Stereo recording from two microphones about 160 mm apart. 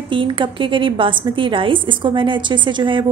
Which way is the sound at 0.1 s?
30° right (ahead or behind).